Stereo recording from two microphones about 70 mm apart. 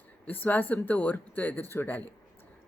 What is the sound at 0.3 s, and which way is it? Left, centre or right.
Speech, left.